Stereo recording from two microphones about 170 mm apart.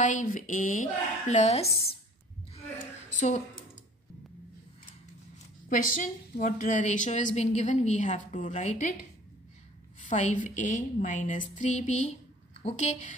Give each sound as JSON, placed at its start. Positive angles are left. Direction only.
{"t": 0.0, "sound": "a woman's voice", "side_deg": 50}
{"t": 3.2, "sound": "a woman's voice", "side_deg": 45}
{"t": 5.7, "sound": "a woman's voice", "side_deg": 50}
{"t": 9.9, "sound": "a woman's voice", "side_deg": 45}